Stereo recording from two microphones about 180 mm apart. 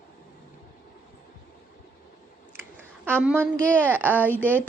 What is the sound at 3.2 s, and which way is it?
Speech, 10° right (ahead or behind).